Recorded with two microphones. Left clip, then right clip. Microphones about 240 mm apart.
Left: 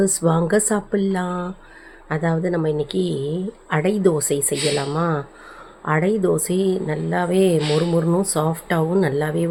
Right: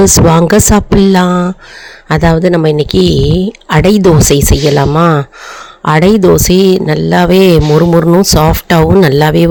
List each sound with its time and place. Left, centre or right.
0.0 s speech: right